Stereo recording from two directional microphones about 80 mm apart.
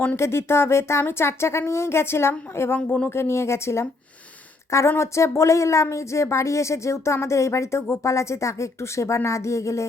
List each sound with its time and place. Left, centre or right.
0.2 s speech: left
2.7 s speech: centre
3.2 s speech: left
4.9 s speech: left